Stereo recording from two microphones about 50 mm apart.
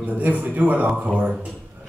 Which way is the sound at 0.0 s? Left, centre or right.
Right.